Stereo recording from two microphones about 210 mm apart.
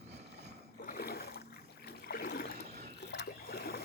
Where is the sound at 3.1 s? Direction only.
50° left (ahead or behind).